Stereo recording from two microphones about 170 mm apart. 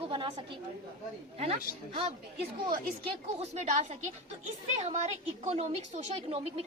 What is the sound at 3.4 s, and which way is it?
A woman's voice, 40° right (ahead or behind).